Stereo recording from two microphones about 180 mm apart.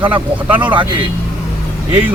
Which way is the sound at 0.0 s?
10° right (ahead or behind).